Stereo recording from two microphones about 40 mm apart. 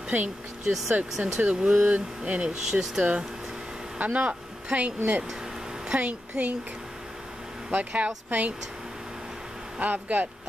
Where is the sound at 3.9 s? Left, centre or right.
Right.